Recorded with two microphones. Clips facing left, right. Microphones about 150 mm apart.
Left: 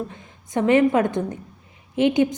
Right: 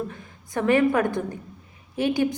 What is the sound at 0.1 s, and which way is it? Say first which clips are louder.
A woman's voice: left 4 dB; 20° left (ahead or behind).